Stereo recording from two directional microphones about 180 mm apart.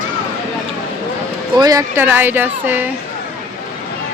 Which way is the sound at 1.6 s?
20° right (ahead or behind).